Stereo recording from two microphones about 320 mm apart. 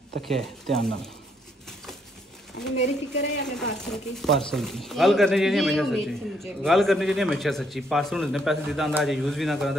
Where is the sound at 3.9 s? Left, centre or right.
Centre.